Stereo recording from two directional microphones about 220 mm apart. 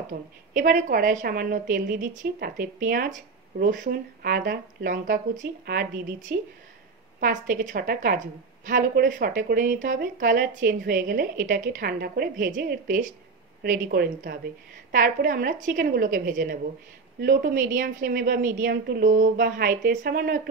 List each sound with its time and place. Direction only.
0.1 s a woman's voice: 35° right (ahead or behind)